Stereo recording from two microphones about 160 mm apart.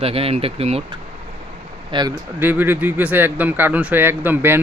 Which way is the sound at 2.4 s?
10° right (ahead or behind).